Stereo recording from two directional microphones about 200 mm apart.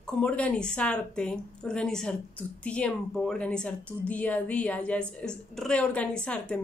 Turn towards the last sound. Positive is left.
turn(degrees=5)  # may be behind; listen again after turning